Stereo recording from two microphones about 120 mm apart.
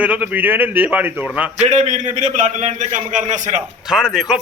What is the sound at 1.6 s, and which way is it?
A man's voice, 75° right (ahead or behind).